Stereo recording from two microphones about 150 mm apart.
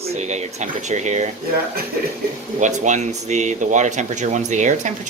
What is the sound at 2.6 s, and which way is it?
Speech, 55° right (ahead or behind).